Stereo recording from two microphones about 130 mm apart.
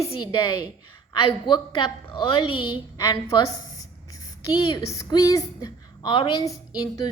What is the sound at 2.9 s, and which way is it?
Speech, 25° left (ahead or behind).